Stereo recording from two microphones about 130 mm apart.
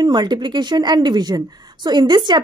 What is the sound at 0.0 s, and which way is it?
Speech, 35° right (ahead or behind).